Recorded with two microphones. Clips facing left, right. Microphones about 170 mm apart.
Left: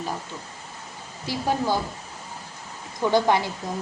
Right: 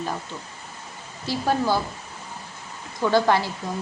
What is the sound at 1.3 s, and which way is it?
Speech, 15° left (ahead or behind).